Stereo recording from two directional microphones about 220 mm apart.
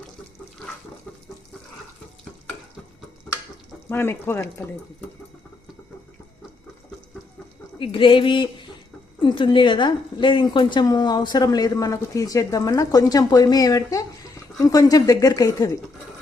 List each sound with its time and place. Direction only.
3.8 s a woman's voice: 10° left (ahead or behind)
7.8 s a woman's voice: 20° left (ahead or behind)